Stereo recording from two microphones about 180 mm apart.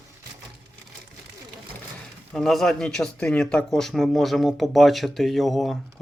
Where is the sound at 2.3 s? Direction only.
Centre (ahead or behind).